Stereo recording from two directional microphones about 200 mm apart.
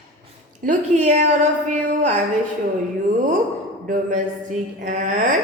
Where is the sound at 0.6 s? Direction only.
40° right (ahead or behind).